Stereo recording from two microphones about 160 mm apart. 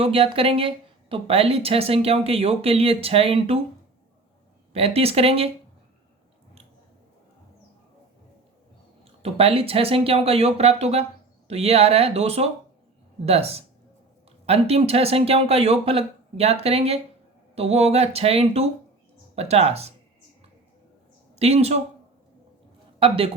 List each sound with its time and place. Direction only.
0.0 s speech: 35° right (ahead or behind)
4.7 s speech: 40° right (ahead or behind)
9.2 s speech: 35° right (ahead or behind)
21.3 s speech: 40° right (ahead or behind)
23.0 s speech: 35° right (ahead or behind)